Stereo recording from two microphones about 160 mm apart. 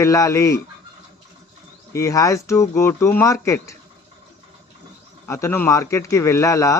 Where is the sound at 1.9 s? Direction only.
20° left (ahead or behind).